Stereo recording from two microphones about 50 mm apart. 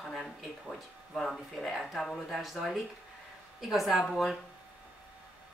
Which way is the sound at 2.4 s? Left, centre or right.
Centre.